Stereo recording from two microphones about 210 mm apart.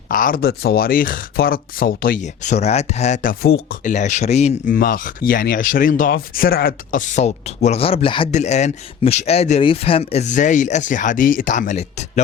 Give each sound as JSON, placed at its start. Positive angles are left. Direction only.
{"t": 0.1, "sound": "speech", "side_deg": 40}